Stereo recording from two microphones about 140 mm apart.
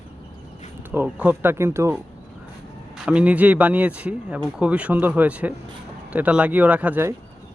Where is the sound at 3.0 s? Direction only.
10° right (ahead or behind).